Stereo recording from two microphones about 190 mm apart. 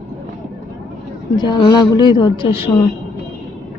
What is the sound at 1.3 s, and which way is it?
Speech, 25° left (ahead or behind).